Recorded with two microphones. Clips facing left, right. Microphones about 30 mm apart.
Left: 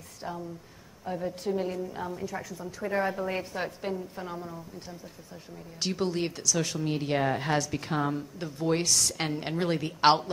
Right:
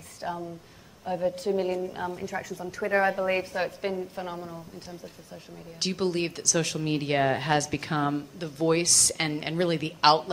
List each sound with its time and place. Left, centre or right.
0.2 s a woman's voice: right
5.8 s a woman's voice: right
8.8 s a woman's voice: centre
9.2 s a woman's voice: right